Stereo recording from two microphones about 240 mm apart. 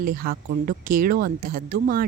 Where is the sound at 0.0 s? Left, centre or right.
Right.